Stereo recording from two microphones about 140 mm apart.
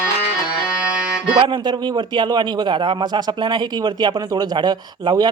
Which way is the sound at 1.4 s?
35° right (ahead or behind).